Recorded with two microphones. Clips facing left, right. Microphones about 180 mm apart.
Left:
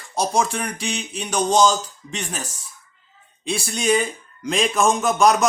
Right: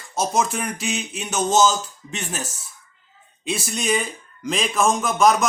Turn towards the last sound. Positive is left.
turn(degrees=0)  # may be behind; listen again after turning